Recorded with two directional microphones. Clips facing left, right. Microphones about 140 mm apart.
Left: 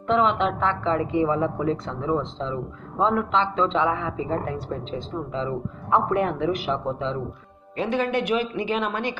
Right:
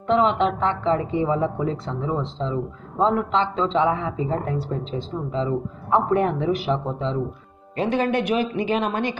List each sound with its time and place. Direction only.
0.0 s a woman's voice: 35° right (ahead or behind)